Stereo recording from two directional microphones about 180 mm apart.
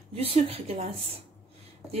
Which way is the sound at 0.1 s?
30° right (ahead or behind).